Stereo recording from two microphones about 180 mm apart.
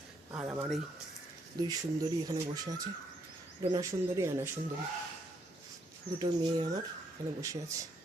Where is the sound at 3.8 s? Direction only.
15° right (ahead or behind).